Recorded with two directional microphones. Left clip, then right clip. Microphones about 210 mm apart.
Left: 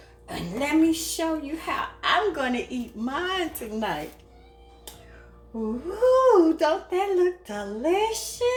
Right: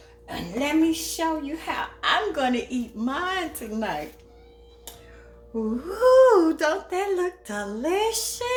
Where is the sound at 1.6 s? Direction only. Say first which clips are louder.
Even; 15° right (ahead or behind).